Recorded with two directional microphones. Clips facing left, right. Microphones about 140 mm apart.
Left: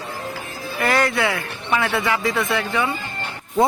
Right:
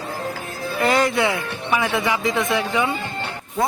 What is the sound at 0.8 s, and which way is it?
Speech, 20° right (ahead or behind).